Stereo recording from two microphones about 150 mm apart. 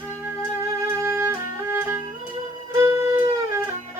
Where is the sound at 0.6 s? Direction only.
20° right (ahead or behind).